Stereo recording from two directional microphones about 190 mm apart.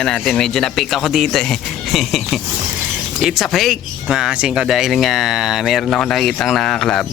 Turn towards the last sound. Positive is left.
turn(degrees=0)  # may be behind; listen again after turning